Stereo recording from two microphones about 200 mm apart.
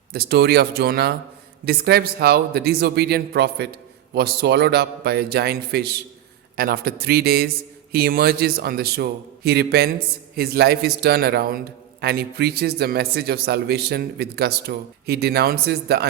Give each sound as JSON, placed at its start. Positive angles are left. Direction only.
{"t": 0.1, "sound": "a man's voice", "side_deg": -55}